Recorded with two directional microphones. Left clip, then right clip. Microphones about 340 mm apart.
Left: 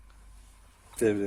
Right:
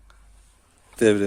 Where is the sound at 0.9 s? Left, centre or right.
Right.